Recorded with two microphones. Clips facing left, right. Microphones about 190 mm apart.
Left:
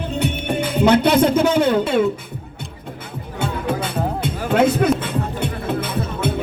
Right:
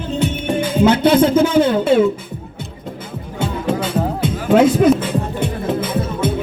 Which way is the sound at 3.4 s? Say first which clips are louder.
Right 3 dB; 60° left (ahead or behind).